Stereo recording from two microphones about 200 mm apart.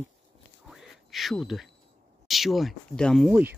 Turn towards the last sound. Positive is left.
turn(degrees=-5)  # may be behind; listen again after turning